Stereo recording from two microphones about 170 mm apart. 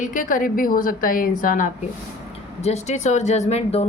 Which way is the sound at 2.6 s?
40° left (ahead or behind).